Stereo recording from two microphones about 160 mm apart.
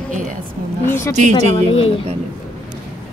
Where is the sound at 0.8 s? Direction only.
15° left (ahead or behind).